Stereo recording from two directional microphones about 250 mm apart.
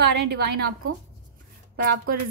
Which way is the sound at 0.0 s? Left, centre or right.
Right.